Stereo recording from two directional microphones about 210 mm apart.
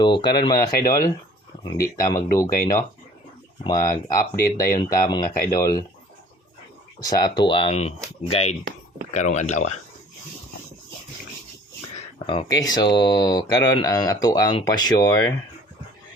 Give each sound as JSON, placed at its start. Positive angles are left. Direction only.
{"t": 0.0, "sound": "speech", "side_deg": 20}
{"t": 7.0, "sound": "speech", "side_deg": 20}
{"t": 12.2, "sound": "speech", "side_deg": 20}